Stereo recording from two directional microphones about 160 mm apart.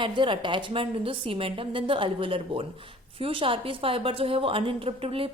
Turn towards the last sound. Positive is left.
turn(degrees=-35)  # may be behind; listen again after turning